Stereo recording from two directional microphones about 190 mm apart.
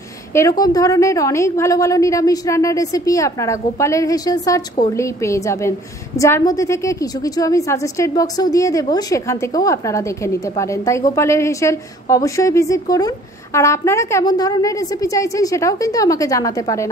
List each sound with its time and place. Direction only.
0.3 s a woman's voice: 15° left (ahead or behind)